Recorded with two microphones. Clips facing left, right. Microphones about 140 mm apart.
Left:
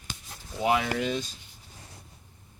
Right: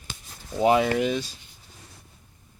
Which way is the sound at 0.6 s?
25° right (ahead or behind).